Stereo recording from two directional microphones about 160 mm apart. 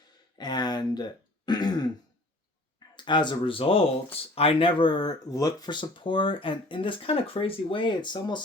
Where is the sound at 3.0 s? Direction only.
30° left (ahead or behind).